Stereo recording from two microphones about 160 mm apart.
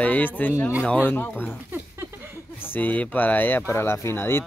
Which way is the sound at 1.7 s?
15° right (ahead or behind).